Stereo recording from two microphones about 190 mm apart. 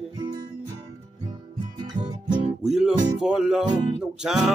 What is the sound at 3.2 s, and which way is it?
Music, 5° right (ahead or behind).